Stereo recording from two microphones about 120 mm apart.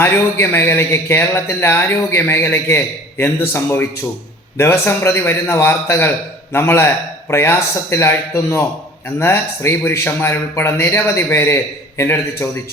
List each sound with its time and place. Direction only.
0.0 s speech: 20° left (ahead or behind)